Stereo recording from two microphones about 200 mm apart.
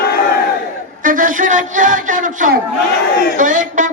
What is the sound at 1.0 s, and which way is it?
A man's voice, 40° right (ahead or behind).